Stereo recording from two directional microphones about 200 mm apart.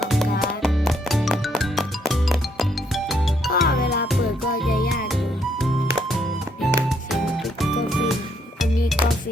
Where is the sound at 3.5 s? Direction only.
50° left (ahead or behind).